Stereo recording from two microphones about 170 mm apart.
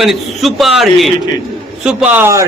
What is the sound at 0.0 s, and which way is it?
A man's voice, centre (ahead or behind).